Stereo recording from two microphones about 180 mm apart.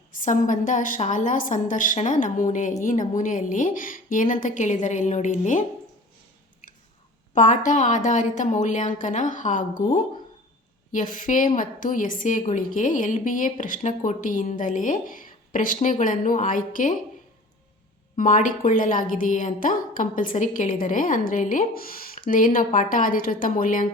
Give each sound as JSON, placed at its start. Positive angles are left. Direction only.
{"t": 0.1, "sound": "a woman's voice", "side_deg": 50}
{"t": 7.3, "sound": "a woman's voice", "side_deg": 45}
{"t": 18.2, "sound": "a woman's voice", "side_deg": 50}